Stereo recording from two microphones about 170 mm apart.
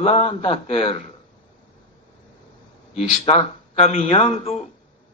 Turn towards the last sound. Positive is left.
turn(degrees=35)  # may be behind; listen again after turning